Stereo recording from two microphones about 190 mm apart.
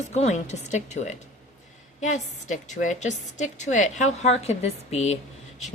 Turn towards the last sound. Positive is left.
turn(degrees=35)  # may be behind; listen again after turning